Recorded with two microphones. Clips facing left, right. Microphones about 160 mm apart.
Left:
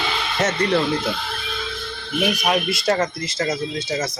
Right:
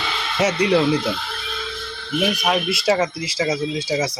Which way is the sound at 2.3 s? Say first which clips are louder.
Left 2 dB; centre (ahead or behind).